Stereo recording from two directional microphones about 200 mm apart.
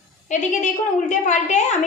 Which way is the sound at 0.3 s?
40° left (ahead or behind).